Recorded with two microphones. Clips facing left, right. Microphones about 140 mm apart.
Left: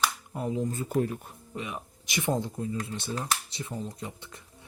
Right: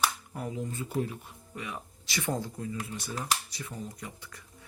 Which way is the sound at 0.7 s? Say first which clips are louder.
Left 4 dB; 45° left (ahead or behind).